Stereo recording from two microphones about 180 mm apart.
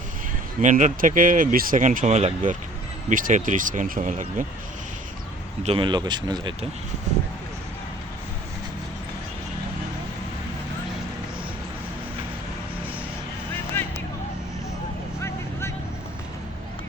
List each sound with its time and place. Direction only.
0.6 s speech: 45° right (ahead or behind)
5.6 s speech: 30° right (ahead or behind)
13.5 s vehicle: 10° left (ahead or behind)